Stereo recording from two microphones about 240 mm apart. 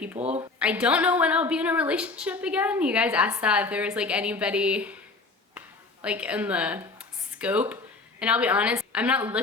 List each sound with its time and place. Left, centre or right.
0.2 s speech: right
0.6 s a woman's voice: centre
5.5 s a sound: centre
8.2 s a woman's voice: centre